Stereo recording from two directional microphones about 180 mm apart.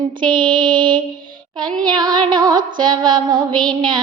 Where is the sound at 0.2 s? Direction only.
25° right (ahead or behind).